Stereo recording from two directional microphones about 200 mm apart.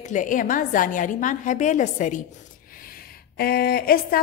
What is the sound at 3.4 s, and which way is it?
Speech, 50° left (ahead or behind).